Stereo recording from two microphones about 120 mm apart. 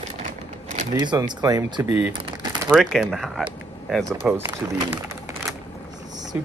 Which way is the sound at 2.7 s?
Centre (ahead or behind).